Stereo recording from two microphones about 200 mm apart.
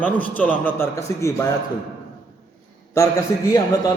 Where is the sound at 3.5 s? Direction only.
20° left (ahead or behind).